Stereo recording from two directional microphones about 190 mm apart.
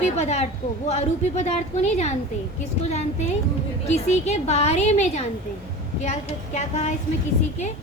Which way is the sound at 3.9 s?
35° left (ahead or behind).